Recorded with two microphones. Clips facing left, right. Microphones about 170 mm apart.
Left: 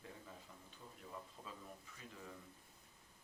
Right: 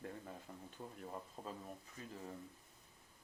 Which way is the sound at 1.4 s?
40° right (ahead or behind).